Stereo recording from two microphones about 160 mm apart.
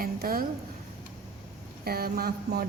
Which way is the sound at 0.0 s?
65° right (ahead or behind).